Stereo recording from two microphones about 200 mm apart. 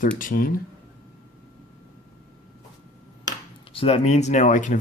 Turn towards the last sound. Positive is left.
turn(degrees=40)  # may be behind; listen again after turning